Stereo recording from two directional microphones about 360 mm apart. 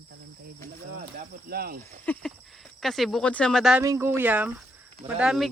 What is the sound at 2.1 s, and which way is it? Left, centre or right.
Speech, centre.